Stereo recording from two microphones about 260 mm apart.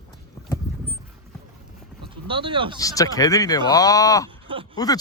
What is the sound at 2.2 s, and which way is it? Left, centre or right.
Speech, centre.